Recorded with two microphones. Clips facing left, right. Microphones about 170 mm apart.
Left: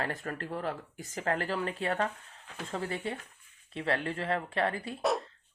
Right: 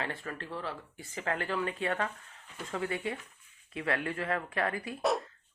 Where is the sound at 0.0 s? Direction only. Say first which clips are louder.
Left 3 dB; 40° left (ahead or behind).